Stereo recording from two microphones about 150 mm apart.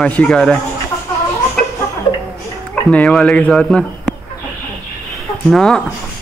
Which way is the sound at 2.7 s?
5° left (ahead or behind).